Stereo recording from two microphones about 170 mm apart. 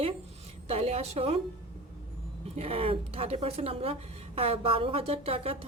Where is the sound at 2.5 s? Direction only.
35° right (ahead or behind).